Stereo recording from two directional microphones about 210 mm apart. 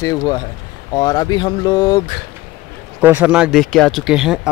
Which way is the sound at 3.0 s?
5° right (ahead or behind).